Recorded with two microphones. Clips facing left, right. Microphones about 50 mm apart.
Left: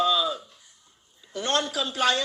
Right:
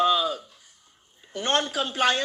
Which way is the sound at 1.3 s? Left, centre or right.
Right.